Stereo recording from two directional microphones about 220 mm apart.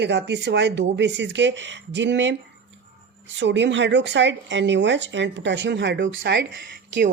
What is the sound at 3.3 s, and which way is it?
Speech, 55° right (ahead or behind).